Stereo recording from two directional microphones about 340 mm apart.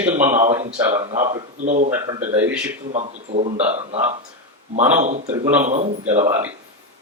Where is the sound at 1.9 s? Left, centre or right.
Centre.